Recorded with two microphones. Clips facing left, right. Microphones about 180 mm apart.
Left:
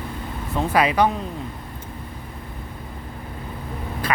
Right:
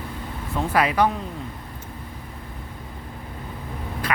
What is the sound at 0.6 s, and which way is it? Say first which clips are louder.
Speech: left 2 dB; 20° left (ahead or behind).